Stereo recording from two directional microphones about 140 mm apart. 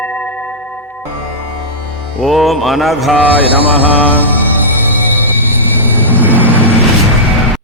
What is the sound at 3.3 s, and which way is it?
Mantra, 10° left (ahead or behind).